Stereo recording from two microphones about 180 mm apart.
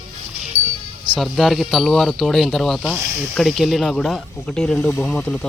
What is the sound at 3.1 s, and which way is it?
Speech, 10° right (ahead or behind).